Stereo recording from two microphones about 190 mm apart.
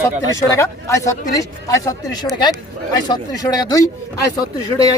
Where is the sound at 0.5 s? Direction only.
15° left (ahead or behind).